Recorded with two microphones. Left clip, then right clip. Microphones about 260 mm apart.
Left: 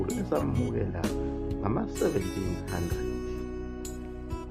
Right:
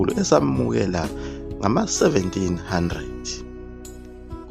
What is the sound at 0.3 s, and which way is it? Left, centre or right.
Speech, right.